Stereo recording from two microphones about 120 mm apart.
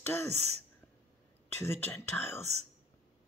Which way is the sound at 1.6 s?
20° left (ahead or behind).